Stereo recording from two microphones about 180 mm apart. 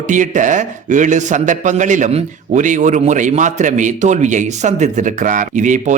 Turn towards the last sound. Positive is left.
turn(degrees=-45)  # may be behind; listen again after turning